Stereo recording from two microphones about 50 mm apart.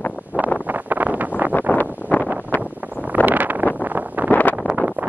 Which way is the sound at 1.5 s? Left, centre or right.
Left.